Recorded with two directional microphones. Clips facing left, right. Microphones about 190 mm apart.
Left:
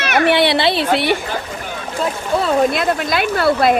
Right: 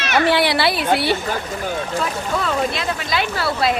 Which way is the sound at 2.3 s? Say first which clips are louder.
Left 6 dB; 35° left (ahead or behind).